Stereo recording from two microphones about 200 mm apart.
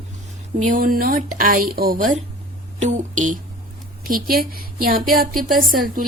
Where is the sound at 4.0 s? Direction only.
45° right (ahead or behind).